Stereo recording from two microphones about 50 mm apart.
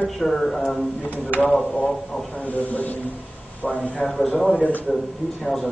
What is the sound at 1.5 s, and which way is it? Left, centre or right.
Speech, left.